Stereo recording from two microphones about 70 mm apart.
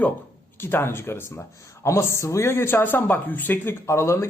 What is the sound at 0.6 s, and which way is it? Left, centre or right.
Speech, left.